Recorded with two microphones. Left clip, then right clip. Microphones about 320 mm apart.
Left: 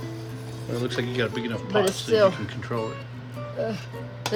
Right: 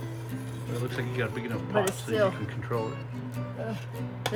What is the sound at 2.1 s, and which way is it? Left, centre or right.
Speech, left.